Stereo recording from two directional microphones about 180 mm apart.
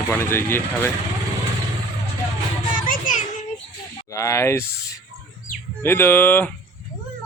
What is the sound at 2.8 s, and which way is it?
Child singing, 45° left (ahead or behind).